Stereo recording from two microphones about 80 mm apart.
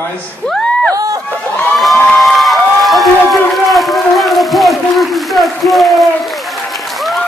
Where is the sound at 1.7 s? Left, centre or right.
Centre.